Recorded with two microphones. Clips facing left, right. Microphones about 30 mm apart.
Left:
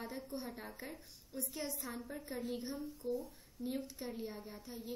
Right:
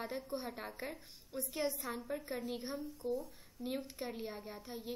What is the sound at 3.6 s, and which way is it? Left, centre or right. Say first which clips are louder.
A woman's voice: right 1 dB; right.